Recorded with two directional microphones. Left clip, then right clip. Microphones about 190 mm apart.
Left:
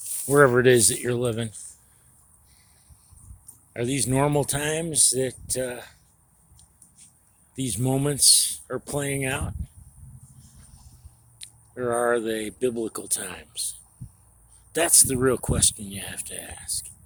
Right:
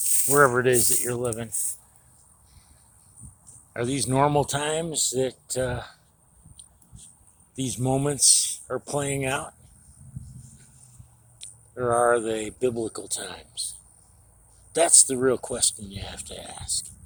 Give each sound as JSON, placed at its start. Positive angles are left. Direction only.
{"t": 0.0, "sound": "snake", "side_deg": -65}
{"t": 0.3, "sound": "speech", "side_deg": 60}
{"t": 3.7, "sound": "speech", "side_deg": 35}
{"t": 6.6, "sound": "a sound", "side_deg": 40}
{"t": 7.5, "sound": "speech", "side_deg": 30}
{"t": 11.3, "sound": "speech", "side_deg": 30}